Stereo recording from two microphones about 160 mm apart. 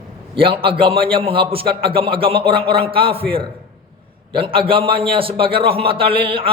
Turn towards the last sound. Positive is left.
turn(degrees=-35)  # may be behind; listen again after turning